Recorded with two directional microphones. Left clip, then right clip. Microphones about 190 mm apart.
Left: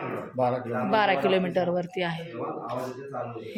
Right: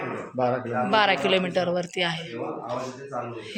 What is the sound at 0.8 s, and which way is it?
Speech, 5° left (ahead or behind).